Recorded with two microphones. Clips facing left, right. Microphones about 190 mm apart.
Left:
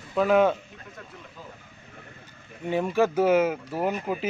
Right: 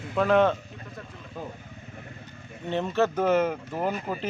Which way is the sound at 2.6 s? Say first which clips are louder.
Left 2 dB; 10° left (ahead or behind).